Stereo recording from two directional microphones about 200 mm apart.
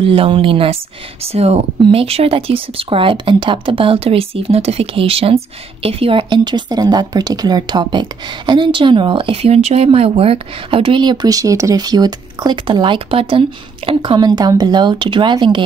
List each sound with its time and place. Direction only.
0.0 s speech: 30° right (ahead or behind)